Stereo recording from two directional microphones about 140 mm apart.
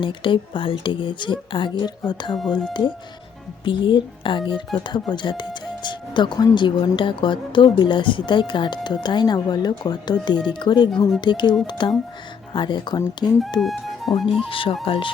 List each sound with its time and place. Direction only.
0.0 s speech: 35° left (ahead or behind)
3.6 s speech: 35° left (ahead or behind)
13.6 s speech: centre (ahead or behind)
14.5 s speech: 40° left (ahead or behind)